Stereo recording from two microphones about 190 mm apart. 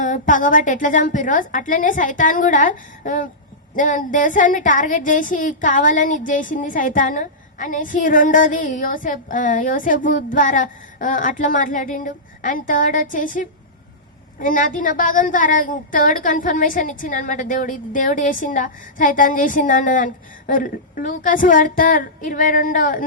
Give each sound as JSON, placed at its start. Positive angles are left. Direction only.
{"t": 0.0, "sound": "a woman's voice", "side_deg": 45}